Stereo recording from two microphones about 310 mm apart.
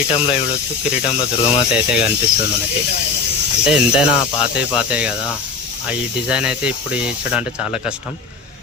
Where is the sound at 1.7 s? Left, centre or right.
Centre.